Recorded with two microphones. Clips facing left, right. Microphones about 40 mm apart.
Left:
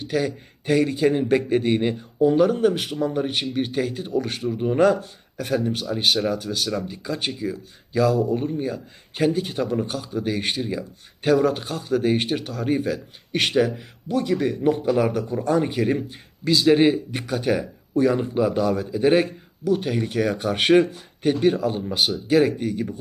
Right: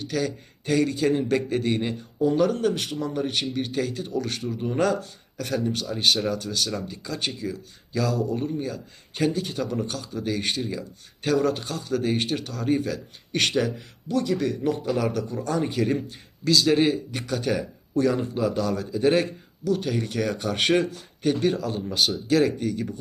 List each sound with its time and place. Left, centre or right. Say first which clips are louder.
0.0 s speech: left 3 dB; centre